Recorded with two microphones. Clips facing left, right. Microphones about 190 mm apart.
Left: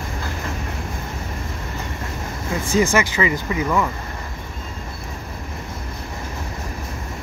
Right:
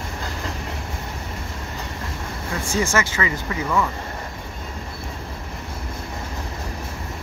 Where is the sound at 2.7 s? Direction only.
15° left (ahead or behind).